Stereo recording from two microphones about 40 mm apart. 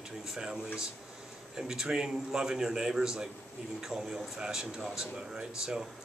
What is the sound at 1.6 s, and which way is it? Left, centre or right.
A man's voice, centre.